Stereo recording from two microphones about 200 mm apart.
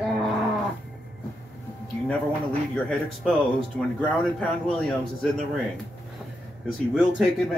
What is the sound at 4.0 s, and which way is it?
Speech, 5° left (ahead or behind).